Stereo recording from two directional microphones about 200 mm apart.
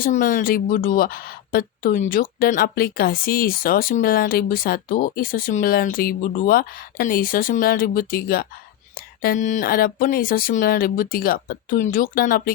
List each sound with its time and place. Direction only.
0.0 s a woman's voice: 40° left (ahead or behind)